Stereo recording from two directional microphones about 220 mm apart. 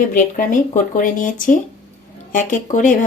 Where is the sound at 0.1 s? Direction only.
35° left (ahead or behind).